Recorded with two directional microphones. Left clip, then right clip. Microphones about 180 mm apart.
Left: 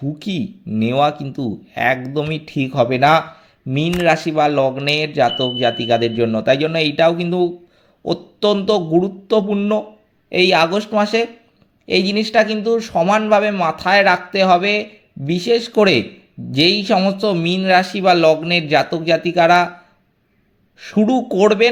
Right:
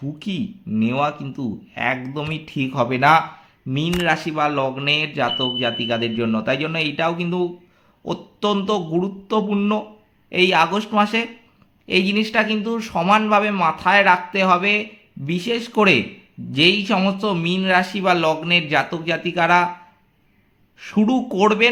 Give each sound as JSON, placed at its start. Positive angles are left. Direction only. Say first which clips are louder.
{"t": 0.2, "sound": "a man's voice", "louder": "left 3 dB", "side_deg": 25}
{"t": 20.7, "sound": "speech", "louder": "left 4 dB", "side_deg": 20}